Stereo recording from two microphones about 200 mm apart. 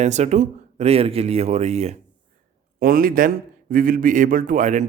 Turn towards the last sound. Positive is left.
turn(degrees=-40)  # may be behind; listen again after turning